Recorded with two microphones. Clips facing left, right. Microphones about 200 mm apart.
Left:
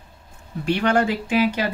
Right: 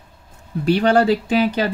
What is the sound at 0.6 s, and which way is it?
Speech, 35° right (ahead or behind).